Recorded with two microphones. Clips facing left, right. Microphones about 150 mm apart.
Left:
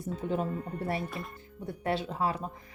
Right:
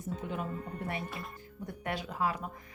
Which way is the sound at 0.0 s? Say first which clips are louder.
Left 5 dB; 35° left (ahead or behind).